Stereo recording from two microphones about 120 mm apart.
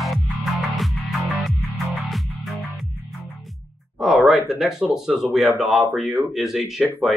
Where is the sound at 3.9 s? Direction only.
5° right (ahead or behind).